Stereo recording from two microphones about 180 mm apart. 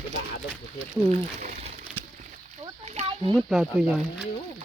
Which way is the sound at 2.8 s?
40° right (ahead or behind).